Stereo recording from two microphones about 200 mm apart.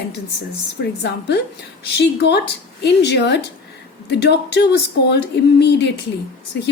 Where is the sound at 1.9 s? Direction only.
55° left (ahead or behind).